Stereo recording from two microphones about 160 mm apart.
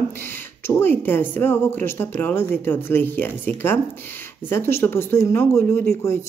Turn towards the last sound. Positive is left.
turn(degrees=15)  # may be behind; listen again after turning